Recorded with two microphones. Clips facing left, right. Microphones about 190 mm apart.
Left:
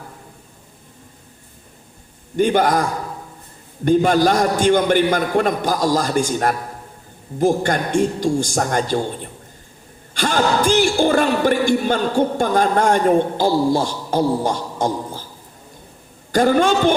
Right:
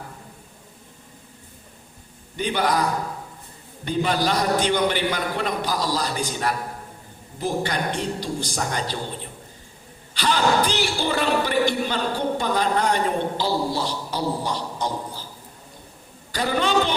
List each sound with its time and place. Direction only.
2.3 s speech: 50° left (ahead or behind)
3.8 s speech: 45° left (ahead or behind)
10.2 s speech: 45° left (ahead or behind)
16.3 s speech: 50° left (ahead or behind)